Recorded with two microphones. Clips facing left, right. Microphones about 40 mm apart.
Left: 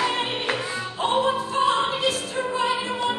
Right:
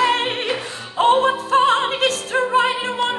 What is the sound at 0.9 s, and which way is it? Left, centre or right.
Music, right.